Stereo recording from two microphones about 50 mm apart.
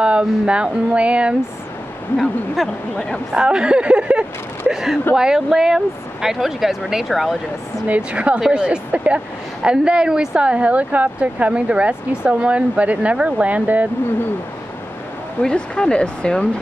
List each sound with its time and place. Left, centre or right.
0.0 s speech: right
2.1 s speech: centre
3.4 s speech: centre
7.8 s speech: right
15.4 s speech: centre